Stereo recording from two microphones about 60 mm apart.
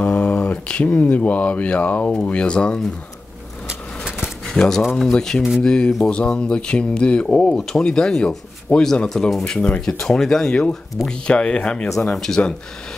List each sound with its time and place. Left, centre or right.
0.0 s a sound: centre
0.9 s speech: left
4.5 s speech: centre
8.7 s speech: left
9.1 s speech: centre